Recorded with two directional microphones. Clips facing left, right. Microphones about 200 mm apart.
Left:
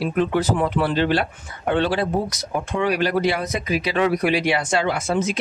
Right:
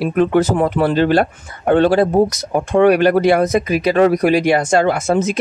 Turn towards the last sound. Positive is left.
turn(degrees=-45)  # may be behind; listen again after turning